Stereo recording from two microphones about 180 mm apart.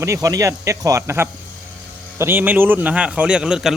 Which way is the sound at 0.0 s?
20° right (ahead or behind).